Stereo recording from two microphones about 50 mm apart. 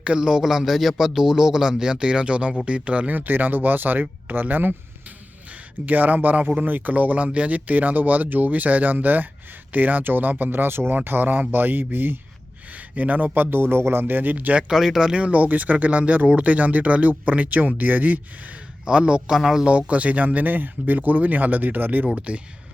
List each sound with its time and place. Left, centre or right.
0.0 s speech: centre; by 4.7 s right
5.0 s a sound: right
6.7 s speech: right
12.7 s speech: right
14.7 s speech: centre
15.1 s speech: right
18.9 s speech: right
19.3 s speech: centre
19.6 s speech: right